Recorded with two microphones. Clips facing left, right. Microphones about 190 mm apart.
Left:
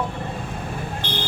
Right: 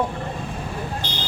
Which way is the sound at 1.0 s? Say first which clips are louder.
Left 3 dB; 55° left (ahead or behind).